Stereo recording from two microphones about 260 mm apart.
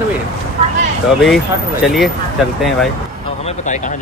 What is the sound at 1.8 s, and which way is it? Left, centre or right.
Speech, centre.